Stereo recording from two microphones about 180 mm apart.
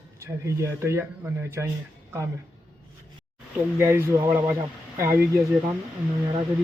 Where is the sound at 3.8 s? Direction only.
15° right (ahead or behind).